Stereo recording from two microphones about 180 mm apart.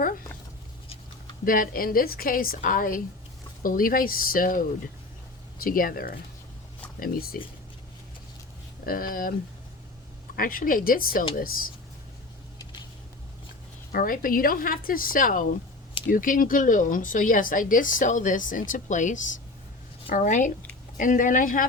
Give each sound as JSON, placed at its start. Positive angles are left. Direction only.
{"t": 1.5, "sound": "speech", "side_deg": 50}
{"t": 8.9, "sound": "speech", "side_deg": 55}
{"t": 10.3, "sound": "speech", "side_deg": 50}
{"t": 13.9, "sound": "speech", "side_deg": 50}